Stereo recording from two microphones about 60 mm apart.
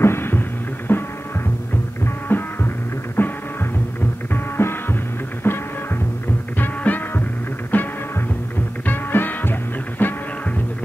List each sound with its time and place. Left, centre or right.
0.0 s a sound: left
0.9 s music: left
2.2 s music: left
6.6 s music: left